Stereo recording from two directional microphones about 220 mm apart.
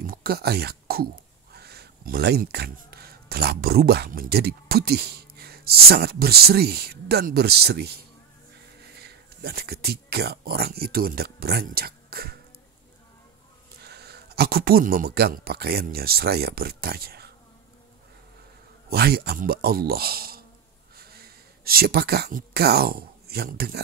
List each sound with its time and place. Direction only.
0.0 s speech: 40° right (ahead or behind)
13.8 s speech: 45° right (ahead or behind)
18.9 s speech: 45° right (ahead or behind)